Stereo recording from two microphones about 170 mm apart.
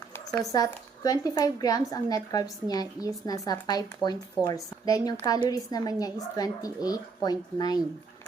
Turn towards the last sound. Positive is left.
turn(degrees=25)  # may be behind; listen again after turning